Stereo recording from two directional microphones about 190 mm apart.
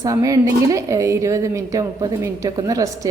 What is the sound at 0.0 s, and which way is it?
A woman's voice, 15° right (ahead or behind).